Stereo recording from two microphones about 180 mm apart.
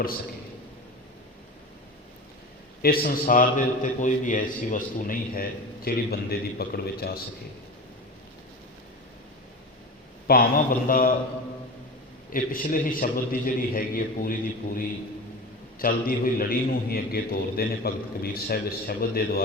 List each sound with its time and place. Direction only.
2.8 s a man's voice: 55° left (ahead or behind)
10.2 s a man's voice: 55° left (ahead or behind)
12.3 s a man's voice: 50° left (ahead or behind)